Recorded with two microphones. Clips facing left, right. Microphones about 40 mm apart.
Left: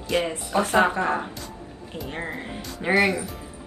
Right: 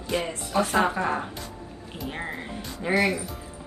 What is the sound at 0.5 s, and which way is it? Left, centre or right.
Speech, left.